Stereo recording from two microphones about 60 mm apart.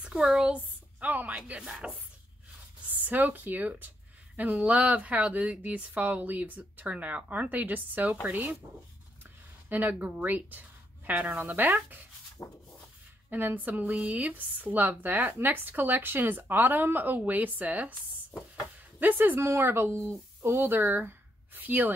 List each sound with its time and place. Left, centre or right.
0.0 s speech: centre
0.5 s a woman's voice: right
2.9 s speech: right
9.7 s a woman's voice: right
12.4 s a sound: left
13.3 s a woman's voice: right
18.9 s a woman's voice: right